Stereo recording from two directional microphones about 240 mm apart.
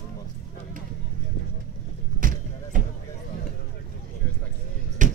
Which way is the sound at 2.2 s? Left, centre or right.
Right.